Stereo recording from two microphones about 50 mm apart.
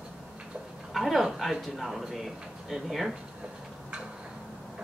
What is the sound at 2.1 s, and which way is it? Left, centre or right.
Speech, centre.